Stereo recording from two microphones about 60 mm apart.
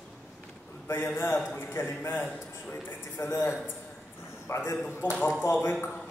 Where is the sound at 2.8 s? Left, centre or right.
Left.